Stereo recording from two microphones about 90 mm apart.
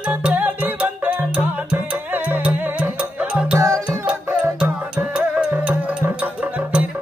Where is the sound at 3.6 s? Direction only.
35° right (ahead or behind).